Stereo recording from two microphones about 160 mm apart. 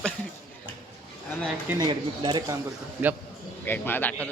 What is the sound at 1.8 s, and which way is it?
Speech, 30° right (ahead or behind).